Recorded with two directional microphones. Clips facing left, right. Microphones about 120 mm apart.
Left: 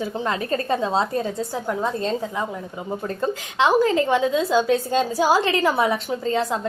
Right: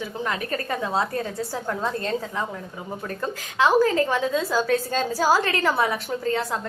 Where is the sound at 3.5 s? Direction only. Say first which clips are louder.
Left 1 dB; 20° left (ahead or behind).